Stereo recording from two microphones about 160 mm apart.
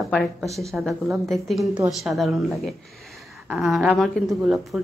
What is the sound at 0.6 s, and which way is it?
Speech, centre (ahead or behind).